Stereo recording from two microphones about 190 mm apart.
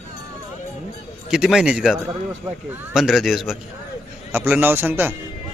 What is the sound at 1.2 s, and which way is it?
A man's voice, 5° right (ahead or behind).